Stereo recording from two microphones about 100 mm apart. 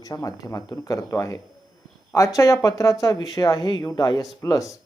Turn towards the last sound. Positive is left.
turn(degrees=35)  # may be behind; listen again after turning